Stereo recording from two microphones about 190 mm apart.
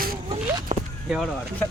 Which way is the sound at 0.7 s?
35° right (ahead or behind).